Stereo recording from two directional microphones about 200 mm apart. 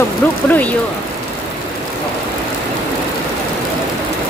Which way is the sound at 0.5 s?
5° left (ahead or behind).